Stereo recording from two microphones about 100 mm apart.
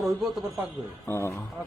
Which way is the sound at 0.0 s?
Centre (ahead or behind).